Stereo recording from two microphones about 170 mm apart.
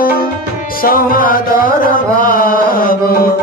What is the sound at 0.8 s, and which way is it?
Mantra, 55° left (ahead or behind).